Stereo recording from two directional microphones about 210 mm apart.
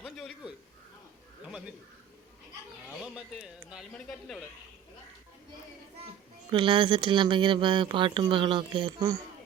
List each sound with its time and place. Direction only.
0.0 s a sound: centre (ahead or behind)
1.5 s speech: 5° right (ahead or behind)
3.0 s speech: centre (ahead or behind)
6.5 s speech: 25° right (ahead or behind)